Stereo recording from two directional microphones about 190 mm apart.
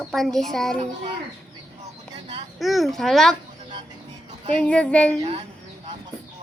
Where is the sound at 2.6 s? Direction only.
Centre (ahead or behind).